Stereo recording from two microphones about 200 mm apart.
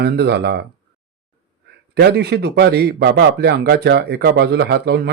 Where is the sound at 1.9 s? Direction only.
55° right (ahead or behind).